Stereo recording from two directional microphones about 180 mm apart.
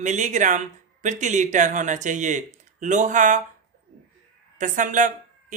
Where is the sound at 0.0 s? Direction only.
40° right (ahead or behind).